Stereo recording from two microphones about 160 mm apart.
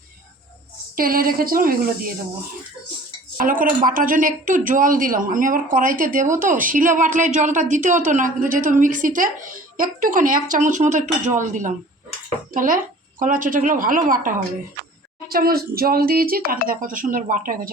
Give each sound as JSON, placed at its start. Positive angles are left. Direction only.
{"t": 0.9, "sound": "speech", "side_deg": -65}
{"t": 3.3, "sound": "a woman's voice", "side_deg": -60}
{"t": 15.3, "sound": "speech", "side_deg": -70}